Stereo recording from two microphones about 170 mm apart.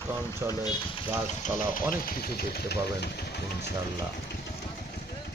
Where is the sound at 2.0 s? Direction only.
60° left (ahead or behind).